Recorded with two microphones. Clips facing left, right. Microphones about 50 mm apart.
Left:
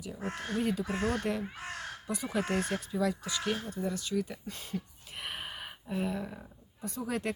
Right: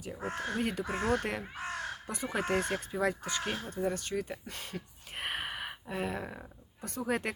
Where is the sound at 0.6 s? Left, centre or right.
Right.